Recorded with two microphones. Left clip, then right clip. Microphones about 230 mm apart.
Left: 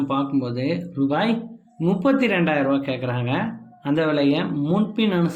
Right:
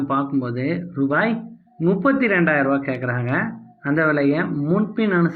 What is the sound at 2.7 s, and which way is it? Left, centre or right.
Speech, right.